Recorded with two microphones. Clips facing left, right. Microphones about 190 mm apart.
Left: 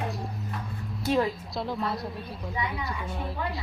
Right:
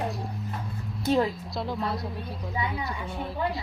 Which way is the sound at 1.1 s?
Centre (ahead or behind).